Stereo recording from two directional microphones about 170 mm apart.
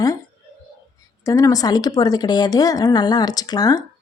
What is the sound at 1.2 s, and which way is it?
Speech, 20° left (ahead or behind).